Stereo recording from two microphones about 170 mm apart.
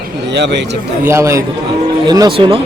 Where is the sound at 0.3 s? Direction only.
90° right.